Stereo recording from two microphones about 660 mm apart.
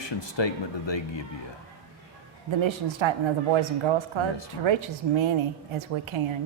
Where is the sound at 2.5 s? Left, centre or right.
Right.